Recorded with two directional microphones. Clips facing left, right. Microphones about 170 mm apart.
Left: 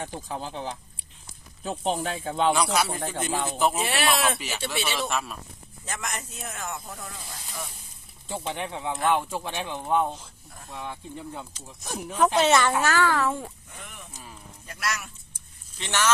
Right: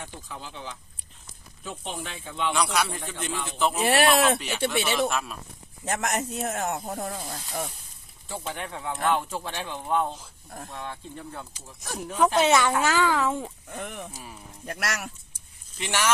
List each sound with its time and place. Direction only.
0.0 s speech: 45° left (ahead or behind)
3.6 s speech: 5° left (ahead or behind)
3.8 s speech: 50° right (ahead or behind)
4.4 s speech: 5° left (ahead or behind)
5.8 s speech: 65° right (ahead or behind); by 7.7 s 45° right (ahead or behind)
8.3 s speech: 20° left (ahead or behind)
12.4 s a child's voice: 10° right (ahead or behind)
13.7 s speech: 55° right (ahead or behind)
14.1 s a child's voice: 10° right (ahead or behind)
14.7 s speech: 65° right (ahead or behind)
15.8 s a child's voice: 10° right (ahead or behind)